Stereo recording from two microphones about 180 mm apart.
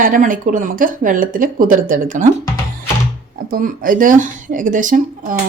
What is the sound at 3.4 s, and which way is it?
A woman's voice, 55° right (ahead or behind).